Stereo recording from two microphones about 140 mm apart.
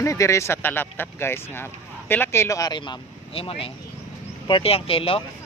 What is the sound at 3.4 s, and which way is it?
Speech, 40° left (ahead or behind).